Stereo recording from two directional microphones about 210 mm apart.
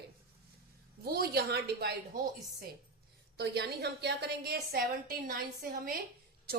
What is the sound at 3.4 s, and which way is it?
A woman's voice, 50° right (ahead or behind).